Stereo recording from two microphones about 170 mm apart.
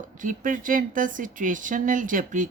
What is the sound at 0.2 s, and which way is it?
Speech, 50° right (ahead or behind).